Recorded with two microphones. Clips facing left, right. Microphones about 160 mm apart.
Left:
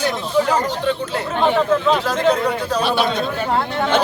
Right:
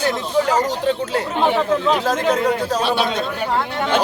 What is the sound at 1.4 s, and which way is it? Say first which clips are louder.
Speech: left 2 dB; 10° right (ahead or behind).